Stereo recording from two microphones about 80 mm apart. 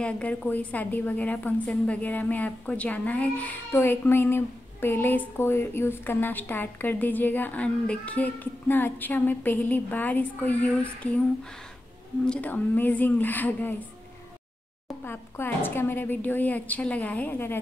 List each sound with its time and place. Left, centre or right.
0.0 s a woman's voice: centre
12.3 s a woman's voice: centre
15.0 s a woman's voice: left